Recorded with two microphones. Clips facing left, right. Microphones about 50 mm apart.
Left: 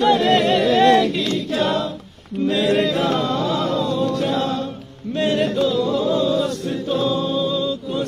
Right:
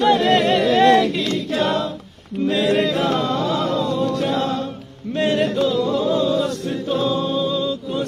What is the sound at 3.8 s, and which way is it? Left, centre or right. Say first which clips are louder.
Choir: even; right.